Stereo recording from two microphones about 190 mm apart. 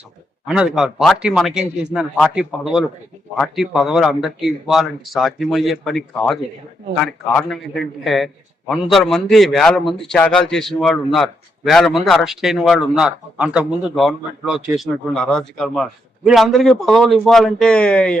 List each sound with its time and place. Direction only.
0.4 s a man's voice: 5° right (ahead or behind)